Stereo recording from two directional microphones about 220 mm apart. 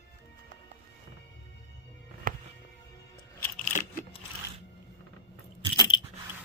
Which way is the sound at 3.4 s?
5° left (ahead or behind).